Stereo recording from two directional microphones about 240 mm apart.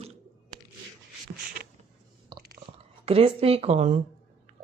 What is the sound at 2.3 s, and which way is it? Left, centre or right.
Chewing, centre.